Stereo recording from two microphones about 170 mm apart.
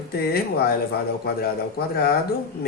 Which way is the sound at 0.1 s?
65° left (ahead or behind).